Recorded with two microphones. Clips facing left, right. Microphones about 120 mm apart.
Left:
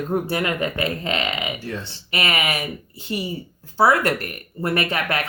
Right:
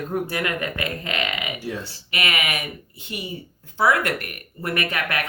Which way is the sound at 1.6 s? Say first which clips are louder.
Even; 10° right (ahead or behind).